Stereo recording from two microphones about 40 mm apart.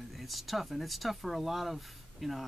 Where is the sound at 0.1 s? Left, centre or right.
Centre.